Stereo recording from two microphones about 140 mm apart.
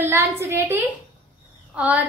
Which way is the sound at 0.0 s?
20° right (ahead or behind).